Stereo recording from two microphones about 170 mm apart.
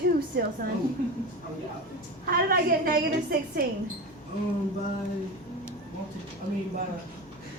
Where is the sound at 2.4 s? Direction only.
60° right (ahead or behind).